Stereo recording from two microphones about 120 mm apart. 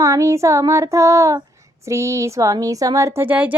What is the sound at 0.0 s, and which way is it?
Speech, 25° right (ahead or behind).